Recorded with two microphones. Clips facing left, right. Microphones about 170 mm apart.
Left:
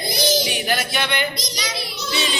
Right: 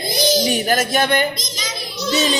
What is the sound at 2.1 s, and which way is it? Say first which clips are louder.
Music: right 7 dB; 45° right (ahead or behind).